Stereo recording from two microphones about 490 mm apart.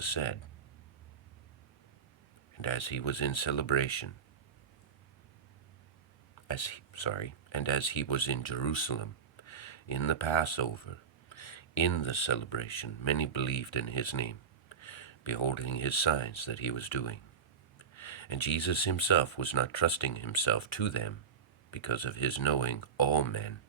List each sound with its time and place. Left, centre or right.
0.0 s speech: left
2.6 s speech: left
6.5 s speech: left